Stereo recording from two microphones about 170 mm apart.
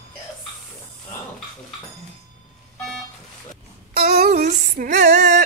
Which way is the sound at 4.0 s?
60° right (ahead or behind).